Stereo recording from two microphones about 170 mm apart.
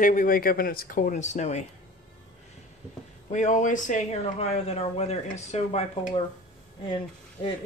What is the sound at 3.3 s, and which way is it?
Speech, 45° left (ahead or behind).